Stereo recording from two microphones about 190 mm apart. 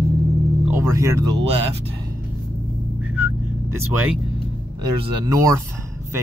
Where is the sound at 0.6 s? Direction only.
15° right (ahead or behind).